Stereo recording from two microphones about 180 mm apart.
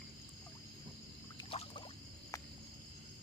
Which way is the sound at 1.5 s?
30° left (ahead or behind).